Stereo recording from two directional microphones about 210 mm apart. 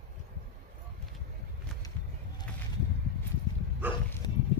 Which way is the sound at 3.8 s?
10° right (ahead or behind).